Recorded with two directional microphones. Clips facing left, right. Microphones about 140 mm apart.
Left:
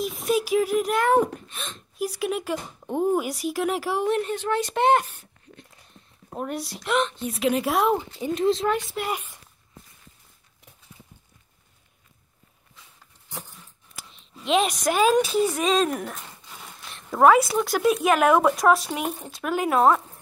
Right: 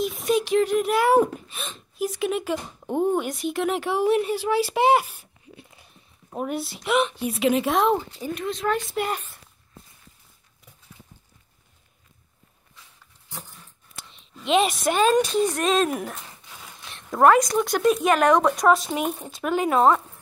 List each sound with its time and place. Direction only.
0.0 s speech: centre (ahead or behind)
8.2 s speech: 30° left (ahead or behind)
8.9 s speech: 10° left (ahead or behind)
13.9 s speech: centre (ahead or behind)